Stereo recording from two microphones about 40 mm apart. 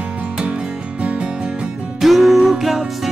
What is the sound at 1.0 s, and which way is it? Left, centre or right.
Music, right.